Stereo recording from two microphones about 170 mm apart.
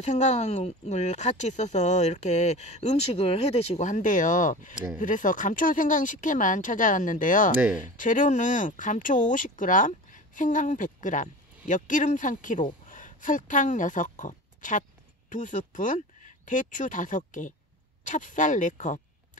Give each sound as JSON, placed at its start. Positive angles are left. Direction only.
{"t": 0.0, "sound": "speech", "side_deg": 40}